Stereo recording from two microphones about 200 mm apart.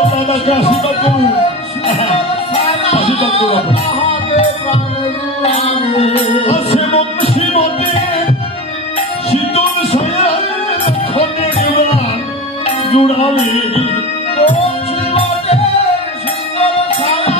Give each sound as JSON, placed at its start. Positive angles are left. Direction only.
{"t": 0.1, "sound": "speech", "side_deg": 30}
{"t": 2.5, "sound": "music", "side_deg": 30}
{"t": 9.3, "sound": "music", "side_deg": 30}